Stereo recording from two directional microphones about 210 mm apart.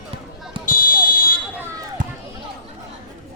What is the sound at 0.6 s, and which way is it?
Fire alarm, 40° left (ahead or behind).